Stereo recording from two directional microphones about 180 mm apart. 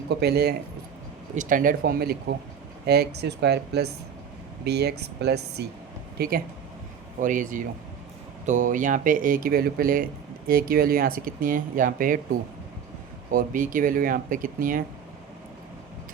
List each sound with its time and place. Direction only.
0.1 s speech: 65° right (ahead or behind)
1.4 s speech: 45° right (ahead or behind); by 5.6 s 65° right (ahead or behind)
6.1 s speech: 55° right (ahead or behind)